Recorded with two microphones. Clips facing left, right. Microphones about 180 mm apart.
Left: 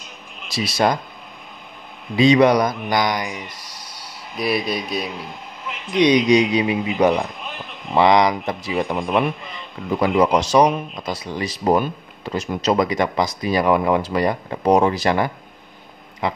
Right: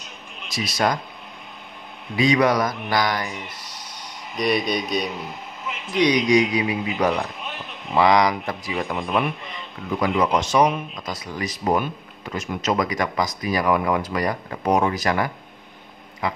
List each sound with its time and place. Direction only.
0.5 s speech: 30° left (ahead or behind)
2.1 s speech: 25° left (ahead or behind)
3.5 s a sound: 10° left (ahead or behind)
5.9 s speech: 25° left (ahead or behind)
8.9 s speech: 35° left (ahead or behind)